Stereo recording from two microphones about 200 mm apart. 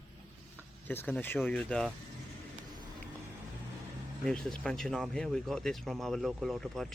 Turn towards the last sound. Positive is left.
turn(degrees=0)  # may be behind; listen again after turning